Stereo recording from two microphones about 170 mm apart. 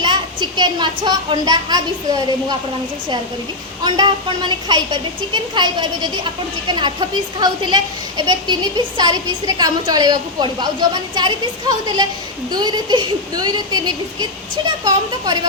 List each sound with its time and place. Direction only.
0.0 s a woman's voice: 25° right (ahead or behind)
3.8 s a woman's voice: 25° right (ahead or behind)